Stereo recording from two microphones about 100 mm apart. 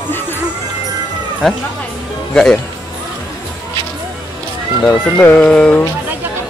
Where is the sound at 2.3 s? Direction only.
5° left (ahead or behind).